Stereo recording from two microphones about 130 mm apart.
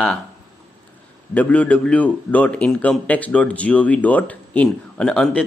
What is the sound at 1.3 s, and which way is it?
A man's voice, 10° left (ahead or behind).